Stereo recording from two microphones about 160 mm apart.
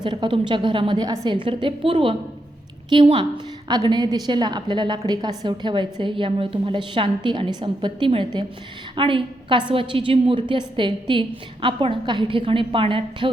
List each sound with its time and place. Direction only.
0.0 s a woman's voice: 30° right (ahead or behind)